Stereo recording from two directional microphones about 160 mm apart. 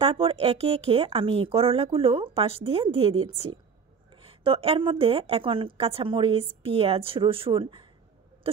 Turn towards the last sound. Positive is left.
turn(degrees=-35)  # may be behind; listen again after turning